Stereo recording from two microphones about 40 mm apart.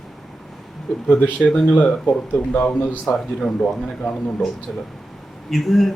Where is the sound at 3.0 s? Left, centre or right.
Centre.